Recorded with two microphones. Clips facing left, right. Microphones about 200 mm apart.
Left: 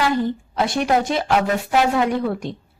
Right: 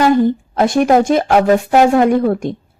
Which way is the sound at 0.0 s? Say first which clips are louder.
Right 8 dB; 50° right (ahead or behind).